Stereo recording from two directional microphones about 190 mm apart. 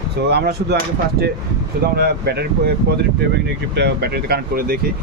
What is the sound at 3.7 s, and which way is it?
Speech, 60° right (ahead or behind).